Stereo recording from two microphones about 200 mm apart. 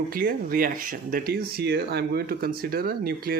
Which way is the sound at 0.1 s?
45° right (ahead or behind).